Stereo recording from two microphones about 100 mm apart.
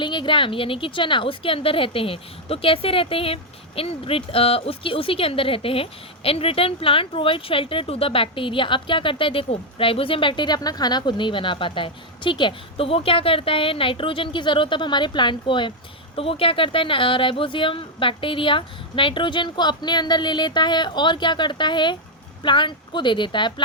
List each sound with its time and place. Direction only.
0.0 s a woman's voice: 55° left (ahead or behind)
16.1 s a woman's voice: 70° left (ahead or behind); by 23.6 s 50° left (ahead or behind)